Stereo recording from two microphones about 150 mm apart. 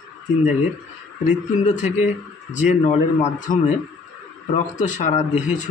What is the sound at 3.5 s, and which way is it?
Speech, 65° left (ahead or behind).